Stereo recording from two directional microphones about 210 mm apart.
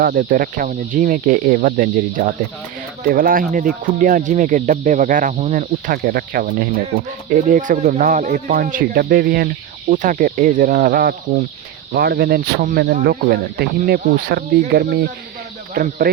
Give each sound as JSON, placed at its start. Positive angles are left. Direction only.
{"t": 0.0, "sound": "speech", "side_deg": -40}